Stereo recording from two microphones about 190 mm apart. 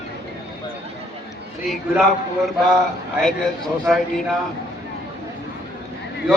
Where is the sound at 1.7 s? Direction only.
Centre (ahead or behind).